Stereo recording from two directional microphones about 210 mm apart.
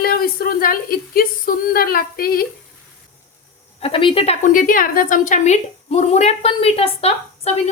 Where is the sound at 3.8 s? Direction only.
25° left (ahead or behind).